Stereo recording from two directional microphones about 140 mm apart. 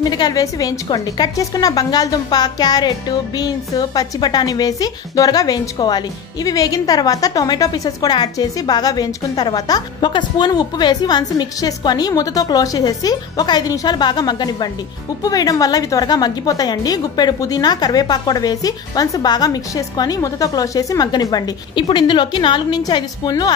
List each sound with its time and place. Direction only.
0.0 s a woman's voice: 30° left (ahead or behind)